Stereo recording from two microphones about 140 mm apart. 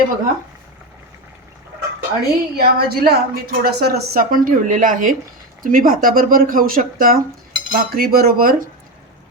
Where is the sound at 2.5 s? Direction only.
90° right; by 5.2 s 70° right (ahead or behind).